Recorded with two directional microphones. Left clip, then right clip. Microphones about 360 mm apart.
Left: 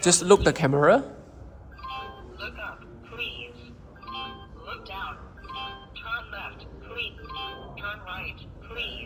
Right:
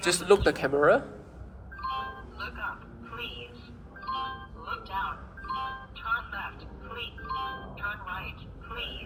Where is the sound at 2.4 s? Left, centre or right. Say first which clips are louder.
Right 1 dB; centre.